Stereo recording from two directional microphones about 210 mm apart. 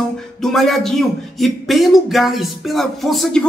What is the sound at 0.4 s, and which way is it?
Speech, centre (ahead or behind).